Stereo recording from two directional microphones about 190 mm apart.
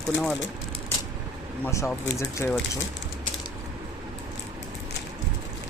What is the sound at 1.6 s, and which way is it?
Speech, 10° left (ahead or behind).